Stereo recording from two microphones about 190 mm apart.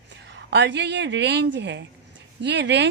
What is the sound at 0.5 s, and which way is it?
A woman's voice, 70° right (ahead or behind).